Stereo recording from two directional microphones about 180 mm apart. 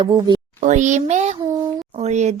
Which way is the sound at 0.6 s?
40° right (ahead or behind).